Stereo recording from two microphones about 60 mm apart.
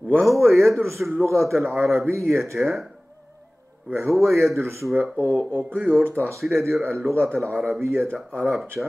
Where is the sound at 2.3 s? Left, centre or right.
Right.